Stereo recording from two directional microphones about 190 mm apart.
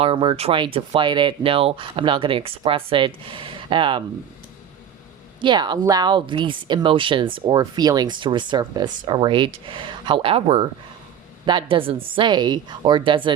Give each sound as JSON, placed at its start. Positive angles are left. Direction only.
{"t": 0.0, "sound": "speech", "side_deg": -30}
{"t": 5.4, "sound": "speech", "side_deg": -25}